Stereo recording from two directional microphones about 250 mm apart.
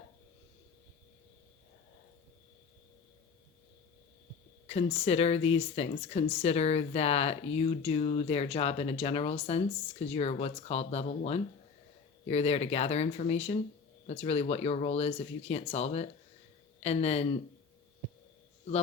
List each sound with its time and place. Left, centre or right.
4.6 s speech: left